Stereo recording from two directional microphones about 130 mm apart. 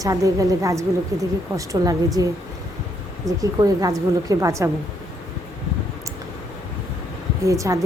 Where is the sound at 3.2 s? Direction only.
25° right (ahead or behind).